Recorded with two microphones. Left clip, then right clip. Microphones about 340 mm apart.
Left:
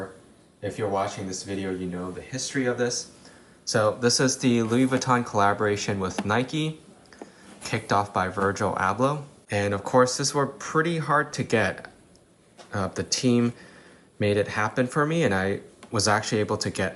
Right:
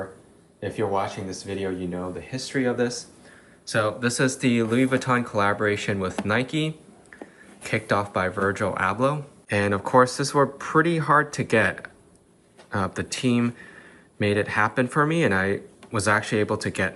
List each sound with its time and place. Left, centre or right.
0.6 s speech: centre